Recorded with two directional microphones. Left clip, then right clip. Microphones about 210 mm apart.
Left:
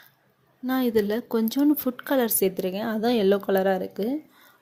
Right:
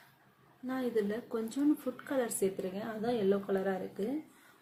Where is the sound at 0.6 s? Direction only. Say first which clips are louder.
Left 10 dB; 45° left (ahead or behind).